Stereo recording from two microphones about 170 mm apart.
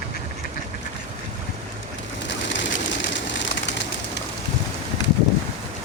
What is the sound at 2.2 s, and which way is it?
Bird, 90° left.